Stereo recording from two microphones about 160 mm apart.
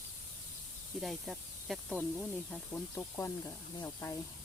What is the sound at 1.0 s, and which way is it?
Speech, centre (ahead or behind).